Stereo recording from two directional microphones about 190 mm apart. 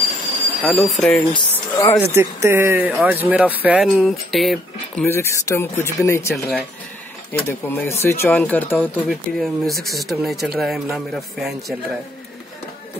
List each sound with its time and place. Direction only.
0.7 s speech: centre (ahead or behind)
1.3 s speech: 30° left (ahead or behind)
2.1 s speech: 15° right (ahead or behind)
5.0 s speech: 15° left (ahead or behind)
6.3 s speech: centre (ahead or behind)
7.3 s speech: 10° left (ahead or behind)